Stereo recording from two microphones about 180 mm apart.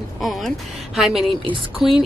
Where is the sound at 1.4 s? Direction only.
30° right (ahead or behind).